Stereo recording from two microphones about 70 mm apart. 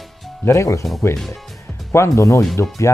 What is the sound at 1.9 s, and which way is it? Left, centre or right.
Speech, left.